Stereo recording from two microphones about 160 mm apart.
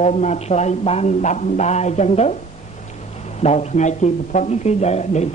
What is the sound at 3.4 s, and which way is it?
Speech, 45° left (ahead or behind).